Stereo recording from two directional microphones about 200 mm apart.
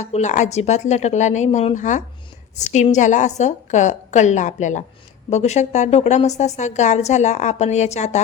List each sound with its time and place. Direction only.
0.0 s a woman's voice: 35° left (ahead or behind)